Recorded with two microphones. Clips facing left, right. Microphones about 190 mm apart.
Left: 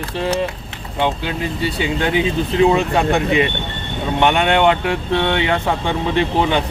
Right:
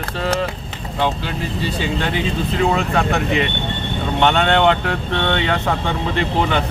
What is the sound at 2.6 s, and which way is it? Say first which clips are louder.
Speech: left 3 dB; 15° left (ahead or behind).